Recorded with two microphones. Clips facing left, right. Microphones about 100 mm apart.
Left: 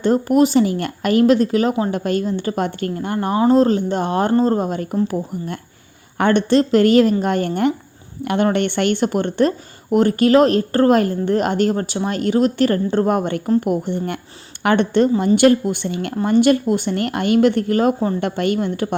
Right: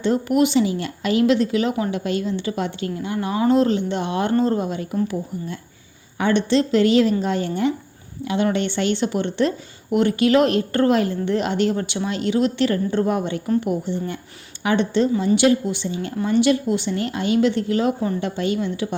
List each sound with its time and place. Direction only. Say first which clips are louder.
0.0 s a woman's voice: left 4 dB; 40° left (ahead or behind)
6.1 s a woman's voice: left 4 dB; 55° left (ahead or behind)
16.2 s a woman's voice: left 4 dB; 50° left (ahead or behind)